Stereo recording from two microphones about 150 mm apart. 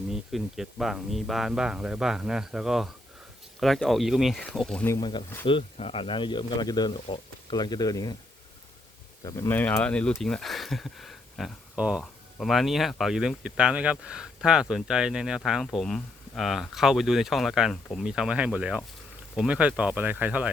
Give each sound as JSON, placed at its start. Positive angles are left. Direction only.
{"t": 0.1, "sound": "speech", "side_deg": 0}
{"t": 4.9, "sound": "speech", "side_deg": 30}
{"t": 9.2, "sound": "speech", "side_deg": 20}